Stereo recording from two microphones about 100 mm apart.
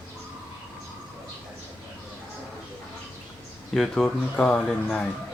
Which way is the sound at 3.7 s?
5° left (ahead or behind).